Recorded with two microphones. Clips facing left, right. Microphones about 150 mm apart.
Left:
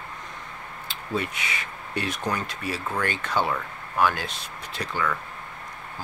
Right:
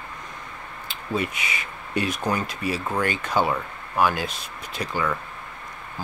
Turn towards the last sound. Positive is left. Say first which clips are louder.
# right 2 dB
turn(degrees=-10)  # may be behind; listen again after turning